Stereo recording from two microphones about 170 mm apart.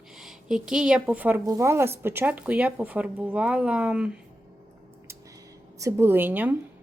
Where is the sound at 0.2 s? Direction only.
Centre (ahead or behind).